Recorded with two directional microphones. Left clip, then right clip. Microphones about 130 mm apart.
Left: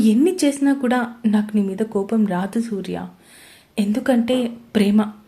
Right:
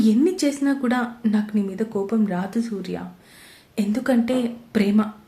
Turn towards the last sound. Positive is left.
turn(degrees=25)  # may be behind; listen again after turning